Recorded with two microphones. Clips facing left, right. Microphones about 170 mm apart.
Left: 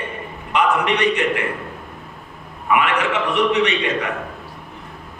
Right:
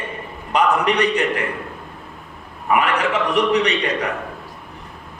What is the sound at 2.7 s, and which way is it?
A man's voice, 40° right (ahead or behind).